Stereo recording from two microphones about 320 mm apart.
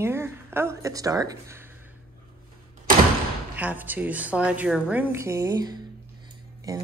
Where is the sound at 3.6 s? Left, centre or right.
Centre.